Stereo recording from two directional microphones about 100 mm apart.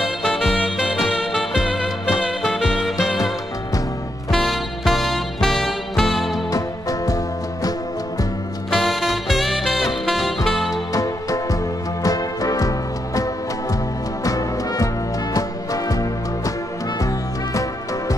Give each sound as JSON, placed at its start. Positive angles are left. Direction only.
{"t": 0.2, "sound": "music", "side_deg": 0}
{"t": 4.3, "sound": "music", "side_deg": 0}
{"t": 6.5, "sound": "music", "side_deg": 35}
{"t": 8.6, "sound": "music", "side_deg": 5}
{"t": 10.9, "sound": "music", "side_deg": 35}